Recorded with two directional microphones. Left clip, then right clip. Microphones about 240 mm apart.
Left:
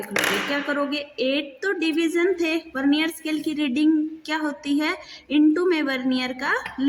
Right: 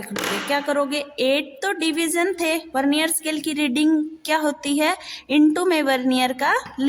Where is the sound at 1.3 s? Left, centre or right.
Right.